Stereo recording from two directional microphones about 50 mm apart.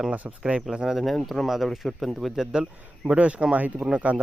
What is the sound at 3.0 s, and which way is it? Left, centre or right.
Speech, right.